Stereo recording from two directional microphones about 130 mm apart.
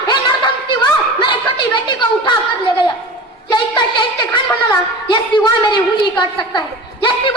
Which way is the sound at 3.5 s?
35° left (ahead or behind).